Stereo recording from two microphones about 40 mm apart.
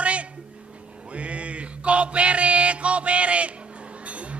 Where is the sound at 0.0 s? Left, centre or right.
Right.